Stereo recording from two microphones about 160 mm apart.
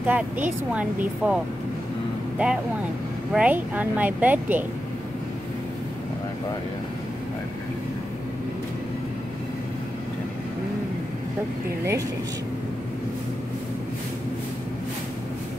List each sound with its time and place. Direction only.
0.0 s speech: 10° right (ahead or behind)